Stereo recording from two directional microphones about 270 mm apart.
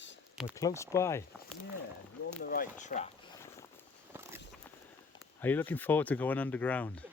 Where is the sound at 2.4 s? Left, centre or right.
Left.